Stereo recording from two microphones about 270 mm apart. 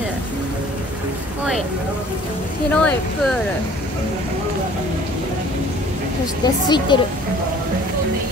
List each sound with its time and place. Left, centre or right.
2.7 s speech: centre
6.4 s speech: centre